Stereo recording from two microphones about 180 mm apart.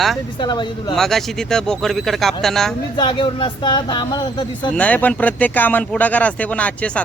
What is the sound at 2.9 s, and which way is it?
Speech, 25° left (ahead or behind).